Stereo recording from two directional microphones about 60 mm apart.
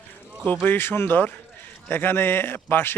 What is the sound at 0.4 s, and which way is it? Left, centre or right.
A man's voice, left.